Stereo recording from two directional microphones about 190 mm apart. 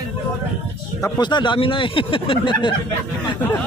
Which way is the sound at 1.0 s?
25° left (ahead or behind).